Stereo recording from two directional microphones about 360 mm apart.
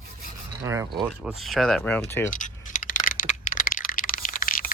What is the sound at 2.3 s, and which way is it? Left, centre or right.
Typing, left.